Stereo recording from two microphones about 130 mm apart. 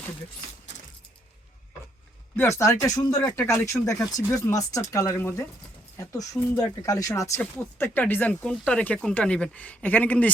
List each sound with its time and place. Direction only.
2.3 s speech: 20° left (ahead or behind)